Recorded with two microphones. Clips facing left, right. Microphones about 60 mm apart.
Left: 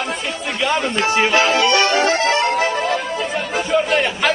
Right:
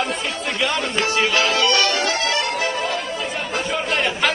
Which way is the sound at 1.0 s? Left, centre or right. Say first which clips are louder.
Left 3 dB; left.